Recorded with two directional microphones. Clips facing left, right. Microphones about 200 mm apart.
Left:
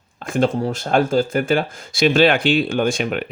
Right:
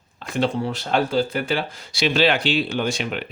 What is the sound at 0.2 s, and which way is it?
Speech, 50° left (ahead or behind).